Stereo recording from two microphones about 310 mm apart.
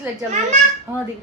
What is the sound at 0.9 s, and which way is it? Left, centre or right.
Speech, centre.